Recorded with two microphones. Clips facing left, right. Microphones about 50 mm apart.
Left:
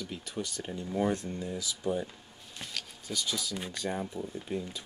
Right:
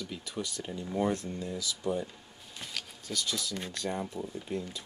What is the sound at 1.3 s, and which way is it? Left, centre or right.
Speech, centre.